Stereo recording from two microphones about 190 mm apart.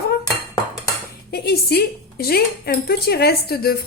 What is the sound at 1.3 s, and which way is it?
Speech, 55° left (ahead or behind).